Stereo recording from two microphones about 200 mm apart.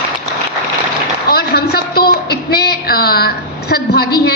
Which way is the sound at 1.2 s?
50° left (ahead or behind).